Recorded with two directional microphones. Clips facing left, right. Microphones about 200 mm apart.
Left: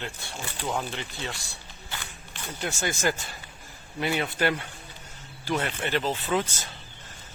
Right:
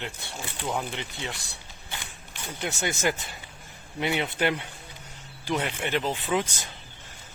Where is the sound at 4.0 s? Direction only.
20° right (ahead or behind).